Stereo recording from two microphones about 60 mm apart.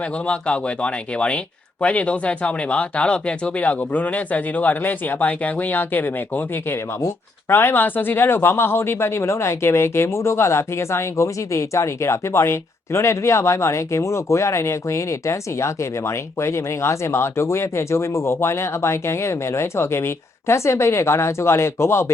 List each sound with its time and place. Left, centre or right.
0.0 s speech: centre; by 22.1 s left